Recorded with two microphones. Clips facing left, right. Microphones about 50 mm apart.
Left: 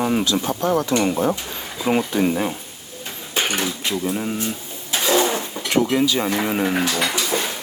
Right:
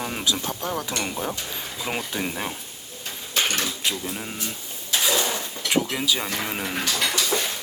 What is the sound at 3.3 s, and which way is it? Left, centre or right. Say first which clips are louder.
Speech: left 3 dB; left.